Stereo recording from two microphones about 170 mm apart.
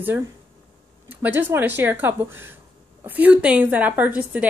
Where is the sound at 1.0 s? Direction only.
10° right (ahead or behind).